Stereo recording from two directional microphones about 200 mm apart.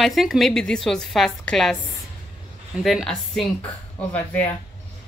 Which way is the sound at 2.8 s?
Centre (ahead or behind).